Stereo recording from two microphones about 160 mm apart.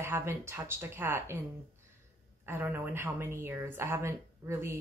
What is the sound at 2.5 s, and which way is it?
A woman's voice, 10° right (ahead or behind).